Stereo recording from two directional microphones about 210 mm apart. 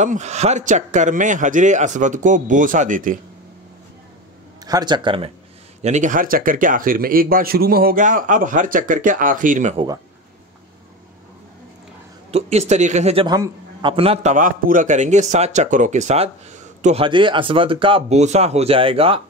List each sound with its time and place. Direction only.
0.0 s a man's voice: 35° right (ahead or behind)
4.6 s a man's voice: 20° right (ahead or behind); by 9.8 s 35° right (ahead or behind)
12.3 s a man's voice: 30° right (ahead or behind)